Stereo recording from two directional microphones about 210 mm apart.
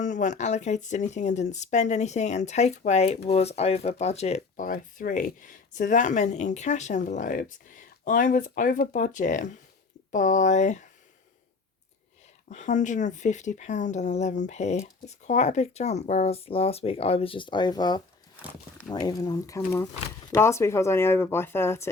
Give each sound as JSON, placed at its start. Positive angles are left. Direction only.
{"t": 0.0, "sound": "speech", "side_deg": 35}
{"t": 12.5, "sound": "speech", "side_deg": 35}